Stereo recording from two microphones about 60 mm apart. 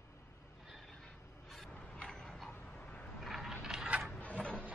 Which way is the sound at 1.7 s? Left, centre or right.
Left.